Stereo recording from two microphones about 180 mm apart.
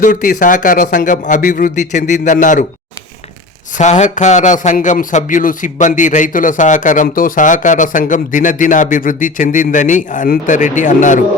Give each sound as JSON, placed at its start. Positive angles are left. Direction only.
{"t": 0.0, "sound": "a man's voice", "side_deg": 50}
{"t": 3.8, "sound": "a man's voice", "side_deg": 40}